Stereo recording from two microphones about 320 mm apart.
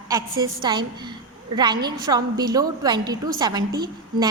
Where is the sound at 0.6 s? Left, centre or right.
Centre.